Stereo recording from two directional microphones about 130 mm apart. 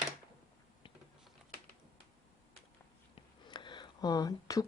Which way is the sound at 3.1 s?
35° left (ahead or behind).